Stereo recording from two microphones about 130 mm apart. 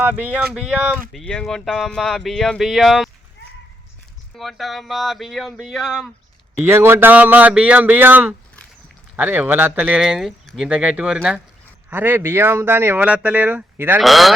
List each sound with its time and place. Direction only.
0.0 s speech: 15° right (ahead or behind)
1.1 s speech: 5° left (ahead or behind)
4.4 s speech: centre (ahead or behind)
6.6 s speech: 20° right (ahead or behind)
14.0 s speech: centre (ahead or behind)